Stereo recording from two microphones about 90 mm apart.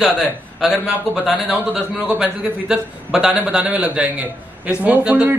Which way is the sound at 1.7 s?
15° right (ahead or behind).